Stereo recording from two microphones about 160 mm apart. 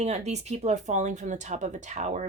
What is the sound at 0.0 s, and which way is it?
Speech, 45° right (ahead or behind).